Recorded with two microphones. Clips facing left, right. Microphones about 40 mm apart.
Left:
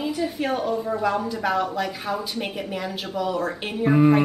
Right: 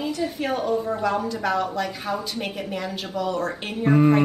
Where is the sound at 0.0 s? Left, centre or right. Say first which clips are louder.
Left 1 dB; centre.